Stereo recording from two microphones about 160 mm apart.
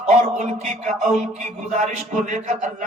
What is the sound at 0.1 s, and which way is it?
A man's voice, 50° right (ahead or behind).